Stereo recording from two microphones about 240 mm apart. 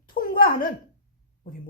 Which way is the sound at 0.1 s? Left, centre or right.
Left.